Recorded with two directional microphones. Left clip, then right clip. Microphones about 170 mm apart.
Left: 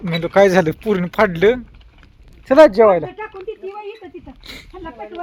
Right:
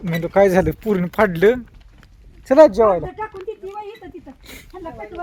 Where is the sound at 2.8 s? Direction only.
10° left (ahead or behind).